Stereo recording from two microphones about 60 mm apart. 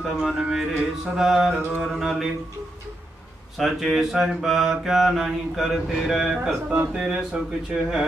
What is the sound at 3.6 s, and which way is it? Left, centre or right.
Mantra, centre.